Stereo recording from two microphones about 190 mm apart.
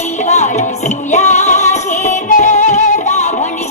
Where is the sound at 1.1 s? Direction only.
35° left (ahead or behind).